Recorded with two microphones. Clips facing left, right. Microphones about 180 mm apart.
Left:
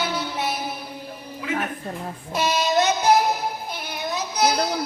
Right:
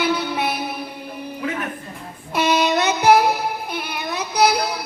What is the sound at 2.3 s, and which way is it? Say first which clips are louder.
Child singing: right 3 dB; 60° right (ahead or behind).